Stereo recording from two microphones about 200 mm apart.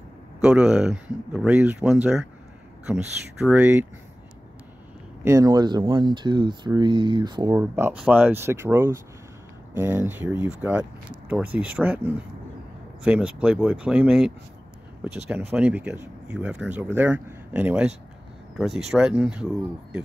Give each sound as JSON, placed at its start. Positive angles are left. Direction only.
{"t": 0.4, "sound": "speech", "side_deg": -5}
{"t": 5.2, "sound": "speech", "side_deg": -15}
{"t": 7.5, "sound": "speech", "side_deg": -10}